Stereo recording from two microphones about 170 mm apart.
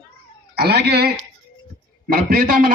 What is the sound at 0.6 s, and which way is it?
Speech, 75° right (ahead or behind).